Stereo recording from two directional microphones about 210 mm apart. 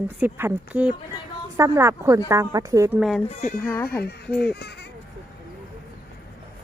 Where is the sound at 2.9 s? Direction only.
Centre (ahead or behind).